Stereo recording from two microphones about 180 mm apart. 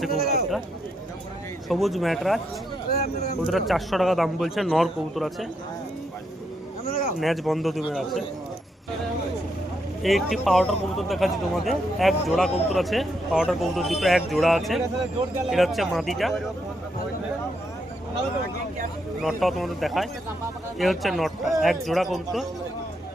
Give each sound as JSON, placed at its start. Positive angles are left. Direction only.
{"t": 0.1, "sound": "speech", "side_deg": 55}
{"t": 1.6, "sound": "speech", "side_deg": 0}
{"t": 2.9, "sound": "speech", "side_deg": 60}
{"t": 3.4, "sound": "speech", "side_deg": 0}
{"t": 7.2, "sound": "speech", "side_deg": 0}
{"t": 10.0, "sound": "speech", "side_deg": 0}
{"t": 19.2, "sound": "speech", "side_deg": 0}